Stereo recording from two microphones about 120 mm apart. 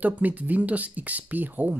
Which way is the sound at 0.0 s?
15° right (ahead or behind).